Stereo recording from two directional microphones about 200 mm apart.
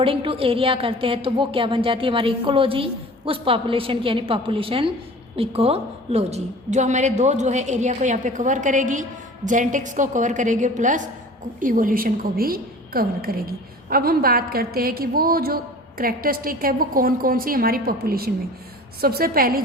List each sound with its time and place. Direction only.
0.0 s a woman's voice: 25° right (ahead or behind); by 19.6 s 45° right (ahead or behind)